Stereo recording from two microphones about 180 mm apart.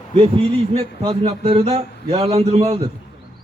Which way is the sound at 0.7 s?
30° right (ahead or behind).